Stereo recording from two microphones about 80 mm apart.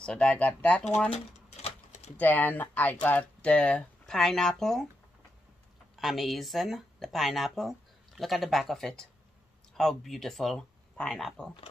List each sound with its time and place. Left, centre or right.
0.0 s speech: centre
2.1 s speech: left; by 4.8 s centre
5.9 s speech: centre